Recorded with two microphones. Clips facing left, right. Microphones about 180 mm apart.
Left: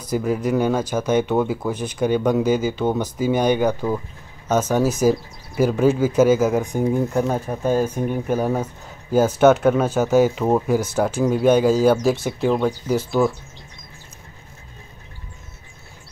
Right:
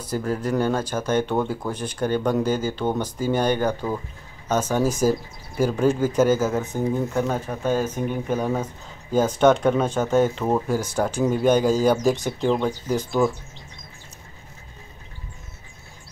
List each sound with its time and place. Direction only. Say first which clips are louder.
0.1 s speech: left 4 dB; 10° left (ahead or behind)